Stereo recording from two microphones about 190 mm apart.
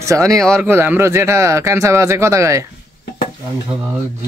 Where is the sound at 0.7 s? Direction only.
10° right (ahead or behind).